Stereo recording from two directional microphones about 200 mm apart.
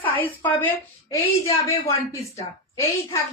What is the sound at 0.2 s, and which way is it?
Speech, 10° left (ahead or behind).